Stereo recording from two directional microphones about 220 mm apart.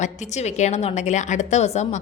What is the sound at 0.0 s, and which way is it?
A woman's voice, 30° left (ahead or behind).